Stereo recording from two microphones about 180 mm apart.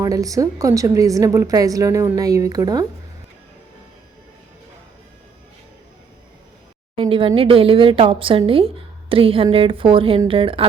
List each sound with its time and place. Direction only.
0.0 s a woman's voice: 20° right (ahead or behind)
6.9 s a woman's voice: 30° right (ahead or behind)